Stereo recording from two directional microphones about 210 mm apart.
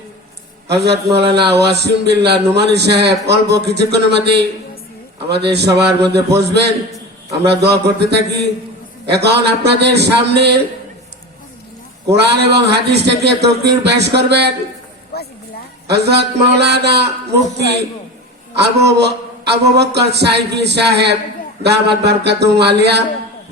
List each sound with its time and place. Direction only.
0.7 s a man's voice: 50° right (ahead or behind)
12.1 s a man's voice: 50° right (ahead or behind)
15.1 s a sound: 50° left (ahead or behind)
15.9 s a man's voice: 50° right (ahead or behind)
18.5 s a man's voice: 50° right (ahead or behind)